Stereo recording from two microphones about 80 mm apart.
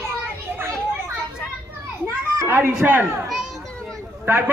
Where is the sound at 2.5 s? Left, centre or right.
Right.